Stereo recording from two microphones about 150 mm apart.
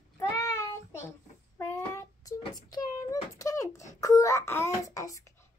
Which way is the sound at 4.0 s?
20° left (ahead or behind).